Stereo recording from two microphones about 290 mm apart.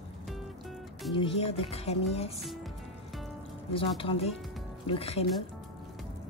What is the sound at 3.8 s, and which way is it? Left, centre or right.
A woman's voice, centre.